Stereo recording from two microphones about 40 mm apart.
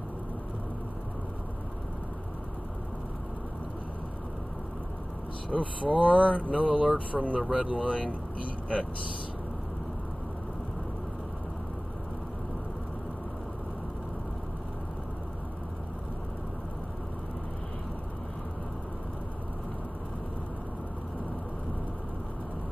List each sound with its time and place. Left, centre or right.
5.5 s speech: left
6.6 s speech: right